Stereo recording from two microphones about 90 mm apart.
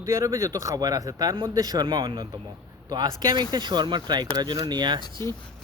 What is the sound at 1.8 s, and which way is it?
Speech, 65° right (ahead or behind).